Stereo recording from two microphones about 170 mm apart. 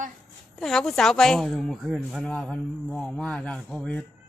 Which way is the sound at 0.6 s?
Centre (ahead or behind).